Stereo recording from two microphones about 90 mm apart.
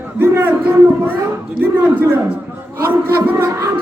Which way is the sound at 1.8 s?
15° right (ahead or behind).